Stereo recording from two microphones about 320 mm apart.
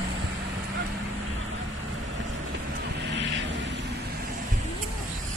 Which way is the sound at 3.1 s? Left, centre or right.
Right.